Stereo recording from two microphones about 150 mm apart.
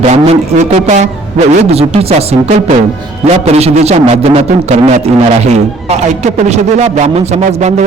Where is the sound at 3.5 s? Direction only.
45° right (ahead or behind).